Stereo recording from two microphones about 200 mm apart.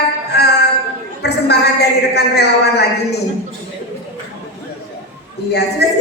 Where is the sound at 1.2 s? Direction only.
55° left (ahead or behind).